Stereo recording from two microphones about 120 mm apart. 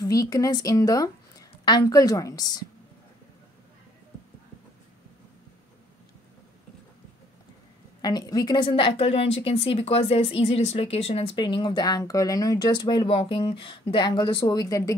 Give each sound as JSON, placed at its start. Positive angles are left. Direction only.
{"t": 0.0, "sound": "speech", "side_deg": 30}
{"t": 8.0, "sound": "speech", "side_deg": 35}
{"t": 11.3, "sound": "speech", "side_deg": 40}